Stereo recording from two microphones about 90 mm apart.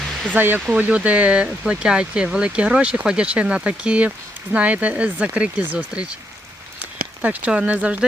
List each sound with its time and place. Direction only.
0.0 s a sound: 5° left (ahead or behind)
0.3 s speech: 20° right (ahead or behind)
7.2 s speech: 15° right (ahead or behind)